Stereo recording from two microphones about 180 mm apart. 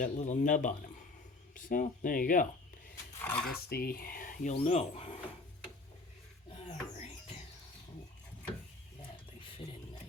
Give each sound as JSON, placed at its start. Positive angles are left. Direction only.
{"t": 0.0, "sound": "speech", "side_deg": 45}
{"t": 3.2, "sound": "speech", "side_deg": 10}
{"t": 3.7, "sound": "speech", "side_deg": 60}
{"t": 4.6, "sound": "speech", "side_deg": 35}
{"t": 6.5, "sound": "a sound", "side_deg": 35}